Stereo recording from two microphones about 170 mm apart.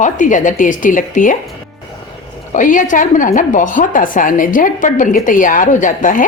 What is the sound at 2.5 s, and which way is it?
A woman's voice, 50° left (ahead or behind).